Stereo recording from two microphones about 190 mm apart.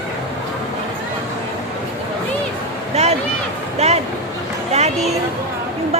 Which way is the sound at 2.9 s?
35° right (ahead or behind).